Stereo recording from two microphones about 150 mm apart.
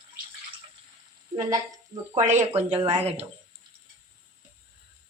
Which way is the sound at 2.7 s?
45° right (ahead or behind).